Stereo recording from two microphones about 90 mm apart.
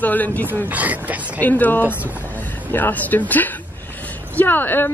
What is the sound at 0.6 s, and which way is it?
Speech, 20° right (ahead or behind).